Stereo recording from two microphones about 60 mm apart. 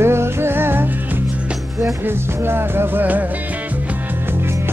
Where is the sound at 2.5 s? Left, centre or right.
Right.